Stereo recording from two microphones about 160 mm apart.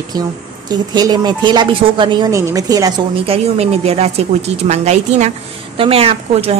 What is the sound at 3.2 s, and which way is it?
A woman's voice, 40° right (ahead or behind).